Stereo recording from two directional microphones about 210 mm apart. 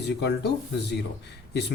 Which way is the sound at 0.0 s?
55° left (ahead or behind).